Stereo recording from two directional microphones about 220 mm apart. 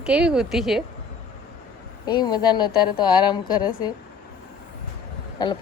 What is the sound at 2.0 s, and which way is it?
Speech, 20° left (ahead or behind).